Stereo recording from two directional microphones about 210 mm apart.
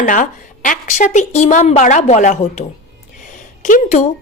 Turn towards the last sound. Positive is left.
turn(degrees=40)  # may be behind; listen again after turning